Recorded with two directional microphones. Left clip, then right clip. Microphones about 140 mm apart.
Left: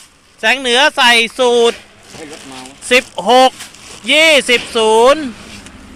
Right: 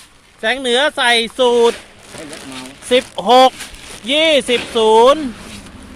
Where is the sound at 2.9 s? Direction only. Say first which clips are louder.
Left 1 dB; 10° right (ahead or behind).